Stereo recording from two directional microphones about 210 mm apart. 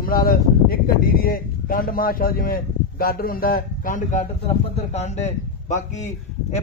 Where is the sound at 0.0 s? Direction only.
45° left (ahead or behind).